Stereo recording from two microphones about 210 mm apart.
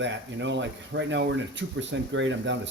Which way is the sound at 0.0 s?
60° right (ahead or behind).